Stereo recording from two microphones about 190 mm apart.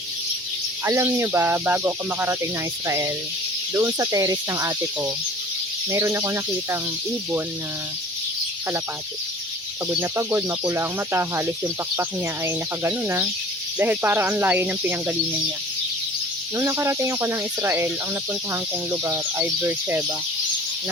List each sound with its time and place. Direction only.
0.9 s speech: 15° right (ahead or behind)
9.9 s speech: 10° right (ahead or behind)
12.5 s speech: 15° right (ahead or behind)
16.6 s speech: 15° right (ahead or behind)